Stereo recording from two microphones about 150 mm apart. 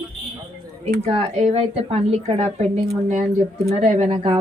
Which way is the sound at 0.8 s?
45° right (ahead or behind).